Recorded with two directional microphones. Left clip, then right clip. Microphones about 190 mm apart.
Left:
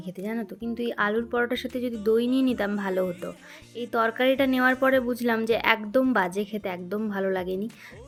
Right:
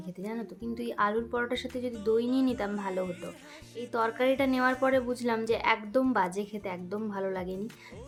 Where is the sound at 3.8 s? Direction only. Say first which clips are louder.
Left 5 dB; 20° left (ahead or behind).